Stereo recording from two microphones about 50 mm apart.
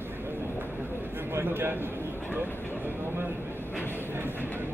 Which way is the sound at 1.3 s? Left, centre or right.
Right.